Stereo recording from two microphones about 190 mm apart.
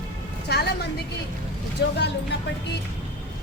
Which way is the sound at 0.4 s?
60° left (ahead or behind).